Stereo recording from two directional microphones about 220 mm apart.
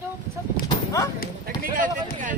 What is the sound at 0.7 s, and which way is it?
Livestock, 20° left (ahead or behind).